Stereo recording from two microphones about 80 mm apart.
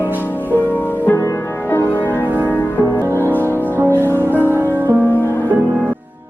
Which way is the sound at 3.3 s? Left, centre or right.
Right.